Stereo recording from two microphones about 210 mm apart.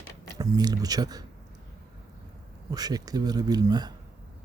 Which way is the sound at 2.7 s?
20° right (ahead or behind).